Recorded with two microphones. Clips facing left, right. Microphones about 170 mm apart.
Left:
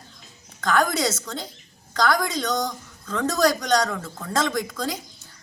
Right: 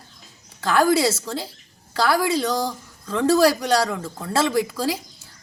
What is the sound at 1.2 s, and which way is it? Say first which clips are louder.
A man's voice: right 4 dB; 10° right (ahead or behind).